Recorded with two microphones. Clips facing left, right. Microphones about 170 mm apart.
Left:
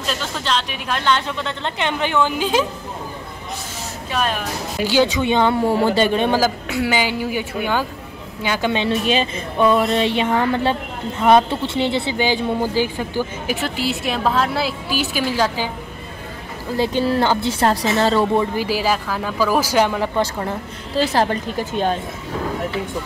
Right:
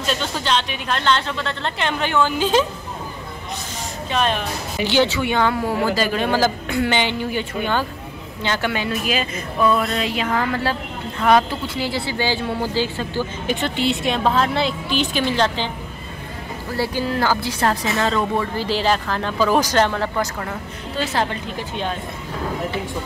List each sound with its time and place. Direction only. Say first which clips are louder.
0.0 s speech: right 2 dB; centre (ahead or behind)
4.1 s speech: right 1 dB; 5° left (ahead or behind); by 6.3 s 25° left (ahead or behind)
6.3 s speech: even; 5° left (ahead or behind)
16.7 s speech: left 4 dB; 20° left (ahead or behind)
18.4 s speech: left 1 dB; 15° left (ahead or behind)
20.2 s a woman's voice: left 3 dB; 30° left (ahead or behind)